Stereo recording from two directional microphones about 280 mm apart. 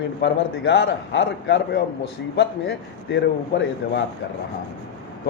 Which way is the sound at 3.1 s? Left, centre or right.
Left.